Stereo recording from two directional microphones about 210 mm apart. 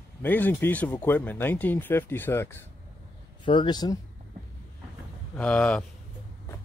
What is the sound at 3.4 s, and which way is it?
Speech, 25° left (ahead or behind).